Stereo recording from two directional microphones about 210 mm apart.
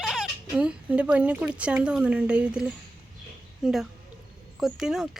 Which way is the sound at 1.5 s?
5° right (ahead or behind).